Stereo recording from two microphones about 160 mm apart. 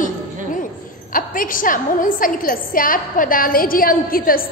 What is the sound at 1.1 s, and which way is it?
A woman's voice, 60° left (ahead or behind).